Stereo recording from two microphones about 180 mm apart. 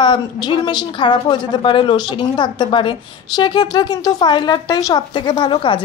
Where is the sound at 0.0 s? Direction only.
25° left (ahead or behind).